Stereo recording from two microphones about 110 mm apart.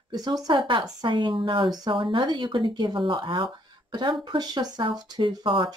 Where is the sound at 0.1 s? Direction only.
40° right (ahead or behind).